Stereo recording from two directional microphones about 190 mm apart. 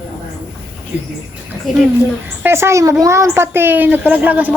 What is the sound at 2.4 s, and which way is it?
A child's voice, 15° right (ahead or behind).